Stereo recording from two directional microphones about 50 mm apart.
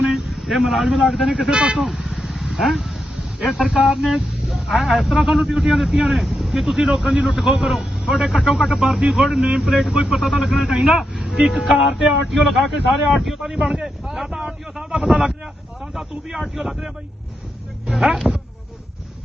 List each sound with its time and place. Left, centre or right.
0.1 s a man's voice: centre
1.5 s speech: centre
1.8 s vehicle: centre
3.6 s speech: centre